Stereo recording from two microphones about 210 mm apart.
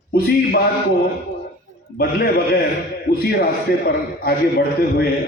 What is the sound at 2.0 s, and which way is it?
A man's voice, 45° left (ahead or behind).